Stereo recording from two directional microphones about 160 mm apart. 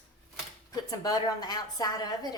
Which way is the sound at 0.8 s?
25° left (ahead or behind).